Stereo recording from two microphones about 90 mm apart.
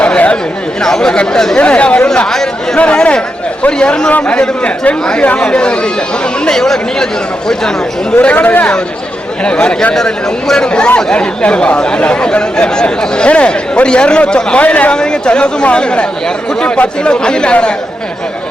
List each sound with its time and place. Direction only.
0.0 s chatter: 15° left (ahead or behind)
0.8 s speech: 5° left (ahead or behind)